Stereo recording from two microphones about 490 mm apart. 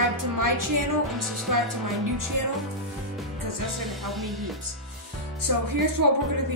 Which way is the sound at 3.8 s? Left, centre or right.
Centre.